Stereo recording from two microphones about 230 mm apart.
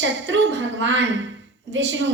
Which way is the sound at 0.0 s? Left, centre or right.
Right.